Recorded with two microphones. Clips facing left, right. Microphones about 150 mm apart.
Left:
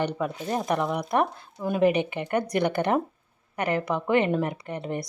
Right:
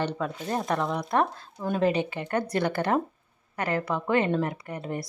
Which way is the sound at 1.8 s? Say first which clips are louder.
Left 4 dB; 15° left (ahead or behind).